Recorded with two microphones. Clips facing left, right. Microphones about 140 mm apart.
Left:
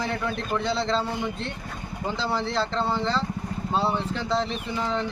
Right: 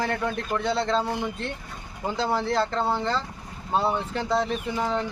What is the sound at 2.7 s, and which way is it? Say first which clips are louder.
Speech: even; 10° right (ahead or behind).